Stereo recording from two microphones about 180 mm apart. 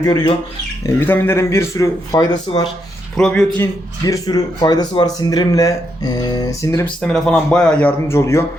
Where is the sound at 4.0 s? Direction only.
20° left (ahead or behind).